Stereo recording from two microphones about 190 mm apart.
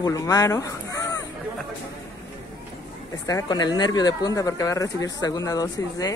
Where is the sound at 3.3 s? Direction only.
20° left (ahead or behind).